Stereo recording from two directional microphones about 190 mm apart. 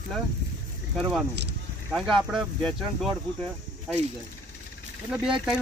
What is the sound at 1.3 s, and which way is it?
Speech, 65° right (ahead or behind).